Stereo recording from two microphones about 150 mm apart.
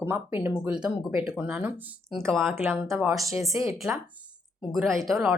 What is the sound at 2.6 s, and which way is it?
Speech, 15° right (ahead or behind).